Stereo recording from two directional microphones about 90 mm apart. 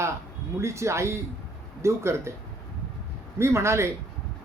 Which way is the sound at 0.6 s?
30° right (ahead or behind).